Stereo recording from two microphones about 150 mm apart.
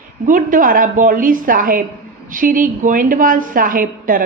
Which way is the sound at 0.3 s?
60° right (ahead or behind).